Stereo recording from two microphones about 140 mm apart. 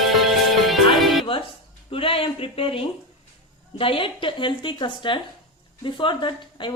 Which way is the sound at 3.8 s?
40° left (ahead or behind).